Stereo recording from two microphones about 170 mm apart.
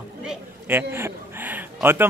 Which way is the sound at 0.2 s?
10° right (ahead or behind).